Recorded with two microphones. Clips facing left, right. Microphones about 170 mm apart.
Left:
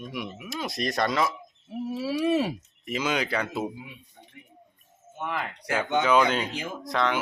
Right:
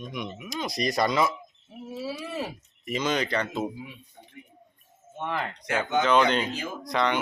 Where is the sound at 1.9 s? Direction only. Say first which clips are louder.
Left 9 dB; 75° left (ahead or behind).